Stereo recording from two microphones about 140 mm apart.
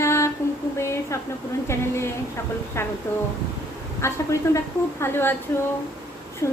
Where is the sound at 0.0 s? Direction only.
20° left (ahead or behind).